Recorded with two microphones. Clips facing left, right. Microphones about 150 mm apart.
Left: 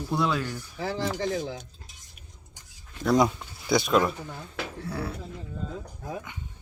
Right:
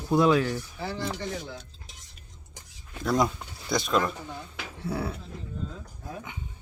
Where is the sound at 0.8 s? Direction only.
90° left.